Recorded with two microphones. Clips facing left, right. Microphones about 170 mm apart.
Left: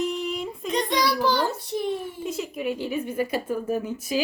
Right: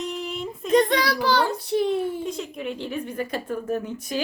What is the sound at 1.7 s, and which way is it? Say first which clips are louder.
Speech: right 8 dB; 85° right.